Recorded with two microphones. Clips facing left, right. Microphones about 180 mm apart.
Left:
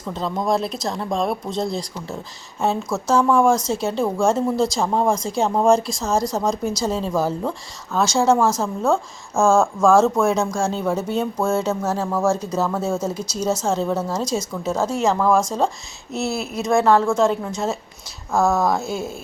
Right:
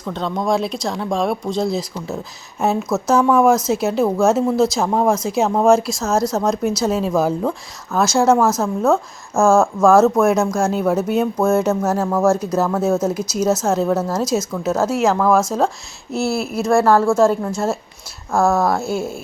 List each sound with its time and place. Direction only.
0.0 s speech: centre (ahead or behind)
8.4 s a woman's voice: 15° left (ahead or behind)
8.6 s speech: 5° right (ahead or behind)
18.3 s a woman's voice: 15° left (ahead or behind)
18.6 s speech: 5° right (ahead or behind)